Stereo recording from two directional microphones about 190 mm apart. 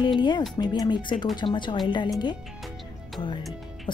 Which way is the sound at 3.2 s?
25° left (ahead or behind).